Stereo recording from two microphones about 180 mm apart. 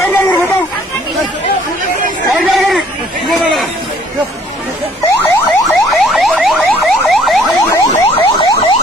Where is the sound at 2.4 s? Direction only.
Centre (ahead or behind).